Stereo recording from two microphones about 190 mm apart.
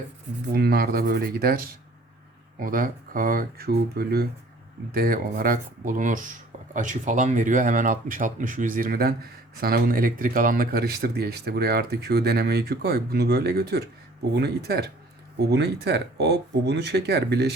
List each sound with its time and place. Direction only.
0.5 s speech: 55° right (ahead or behind)